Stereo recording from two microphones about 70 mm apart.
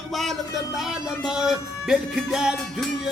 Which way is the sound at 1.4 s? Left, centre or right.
Centre.